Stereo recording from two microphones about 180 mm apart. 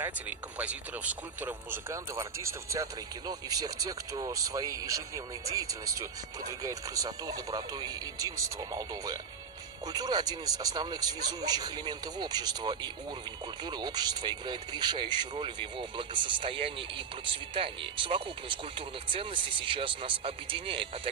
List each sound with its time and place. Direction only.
0.6 s speech: 10° right (ahead or behind); by 21.1 s 30° right (ahead or behind)